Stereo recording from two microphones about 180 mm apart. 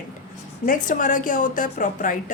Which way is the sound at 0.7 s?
45° left (ahead or behind).